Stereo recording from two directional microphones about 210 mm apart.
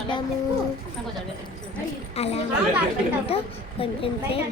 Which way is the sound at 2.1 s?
30° left (ahead or behind).